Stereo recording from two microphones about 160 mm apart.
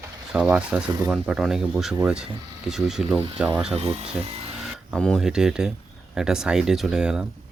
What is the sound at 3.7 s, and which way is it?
Speech, 40° right (ahead or behind).